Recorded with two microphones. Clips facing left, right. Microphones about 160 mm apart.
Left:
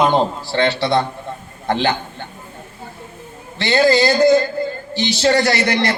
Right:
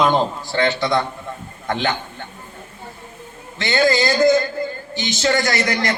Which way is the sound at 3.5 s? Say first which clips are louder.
Left 3 dB; 30° left (ahead or behind).